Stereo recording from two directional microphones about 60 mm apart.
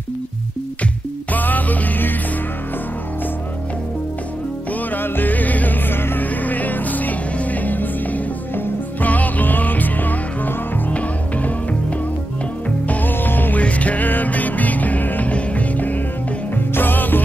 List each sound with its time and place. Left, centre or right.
1.3 s music: left
4.9 s music: left
12.8 s music: left